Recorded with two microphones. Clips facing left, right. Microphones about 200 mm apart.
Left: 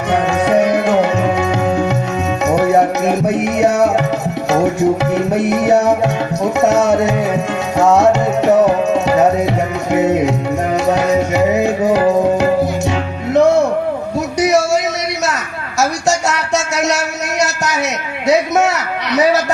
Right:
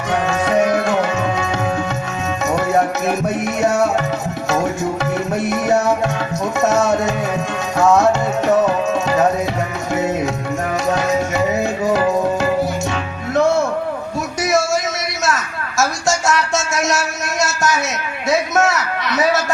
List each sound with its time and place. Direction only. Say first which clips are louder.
0.4 s tabla: left 3 dB; 15° left (ahead or behind)
3.1 s music: left 4 dB; 15° left (ahead or behind)
5.5 s music: left 3 dB; 15° left (ahead or behind)
7.8 s tabla: left 3 dB; 20° left (ahead or behind)
13.3 s music: left 5 dB; 15° left (ahead or behind)
18.3 s a sound: left 4 dB; 15° left (ahead or behind)